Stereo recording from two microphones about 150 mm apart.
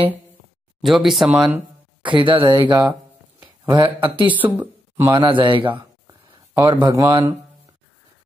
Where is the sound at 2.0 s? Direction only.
35° right (ahead or behind).